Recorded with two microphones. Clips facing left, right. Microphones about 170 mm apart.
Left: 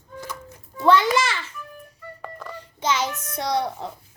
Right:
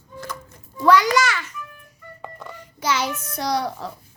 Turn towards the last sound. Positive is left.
turn(degrees=25)  # may be behind; listen again after turning